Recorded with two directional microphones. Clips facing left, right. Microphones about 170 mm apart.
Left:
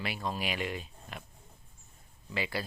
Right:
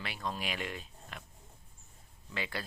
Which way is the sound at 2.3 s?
5° left (ahead or behind).